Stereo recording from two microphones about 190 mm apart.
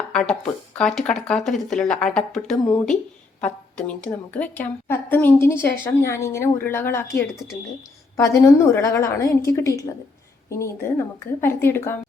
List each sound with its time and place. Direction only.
0.1 s a woman's voice: 5° left (ahead or behind)